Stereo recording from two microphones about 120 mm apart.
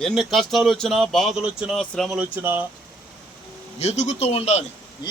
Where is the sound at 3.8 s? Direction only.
65° left (ahead or behind).